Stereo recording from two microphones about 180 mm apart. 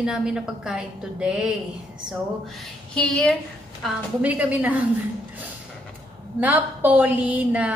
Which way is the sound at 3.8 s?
5° right (ahead or behind).